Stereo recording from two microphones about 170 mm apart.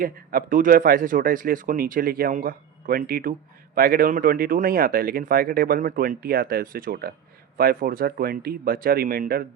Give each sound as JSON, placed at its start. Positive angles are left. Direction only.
{"t": 0.0, "sound": "speech", "side_deg": -55}